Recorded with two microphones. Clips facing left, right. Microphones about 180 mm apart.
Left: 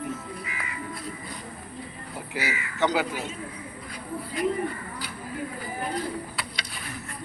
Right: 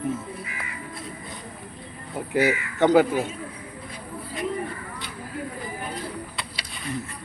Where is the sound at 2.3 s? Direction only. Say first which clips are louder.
Right 9 dB; 50° right (ahead or behind).